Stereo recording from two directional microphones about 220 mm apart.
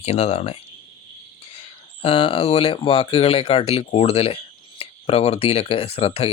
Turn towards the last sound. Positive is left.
turn(degrees=25)  # may be behind; listen again after turning